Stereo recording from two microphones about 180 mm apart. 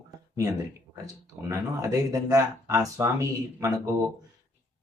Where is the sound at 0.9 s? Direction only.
15° right (ahead or behind).